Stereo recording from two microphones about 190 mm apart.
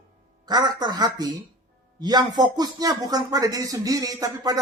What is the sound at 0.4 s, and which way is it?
Speech, 20° right (ahead or behind).